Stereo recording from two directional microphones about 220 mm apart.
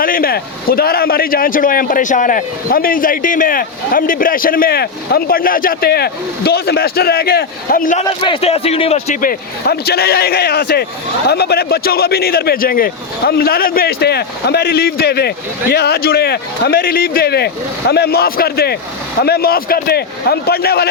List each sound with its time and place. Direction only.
0.0 s a man's voice: 40° left (ahead or behind)
8.2 s speech: 25° left (ahead or behind)
9.6 s speech: 45° left (ahead or behind)